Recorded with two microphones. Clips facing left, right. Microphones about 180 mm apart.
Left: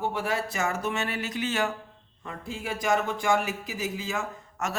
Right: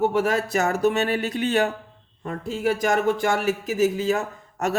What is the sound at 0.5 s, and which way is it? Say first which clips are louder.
Speech: right 8 dB; 70° right (ahead or behind).